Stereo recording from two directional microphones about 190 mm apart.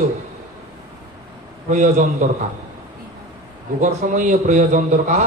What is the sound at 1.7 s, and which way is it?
Speech, 45° right (ahead or behind).